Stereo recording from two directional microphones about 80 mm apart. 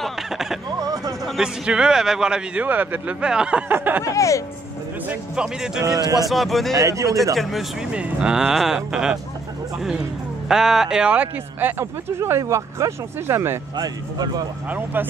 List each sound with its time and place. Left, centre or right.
0.0 s a sound: centre
0.7 s a sound: right
1.4 s speech: centre
3.7 s a sound: right
4.0 s speech: left
5.3 s speech: centre
6.7 s a man's voice: right
7.9 s speech: centre
10.5 s speech: centre
11.8 s speech: right
13.7 s speech: right